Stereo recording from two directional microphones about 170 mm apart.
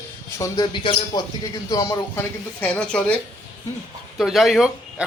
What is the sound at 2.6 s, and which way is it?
A woman's voice, 5° left (ahead or behind).